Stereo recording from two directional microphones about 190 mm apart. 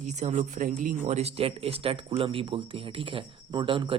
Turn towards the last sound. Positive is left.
turn(degrees=-25)  # may be behind; listen again after turning